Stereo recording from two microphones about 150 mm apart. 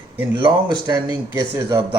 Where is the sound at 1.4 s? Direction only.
25° right (ahead or behind).